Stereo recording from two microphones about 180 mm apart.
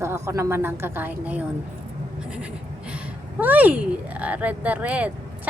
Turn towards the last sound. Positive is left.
turn(degrees=-10)  # may be behind; listen again after turning